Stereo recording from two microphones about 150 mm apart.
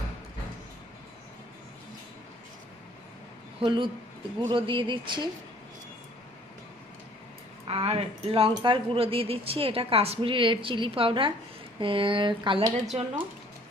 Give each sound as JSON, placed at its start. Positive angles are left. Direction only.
{"t": 3.6, "sound": "speech", "side_deg": -30}
{"t": 7.7, "sound": "speech", "side_deg": -40}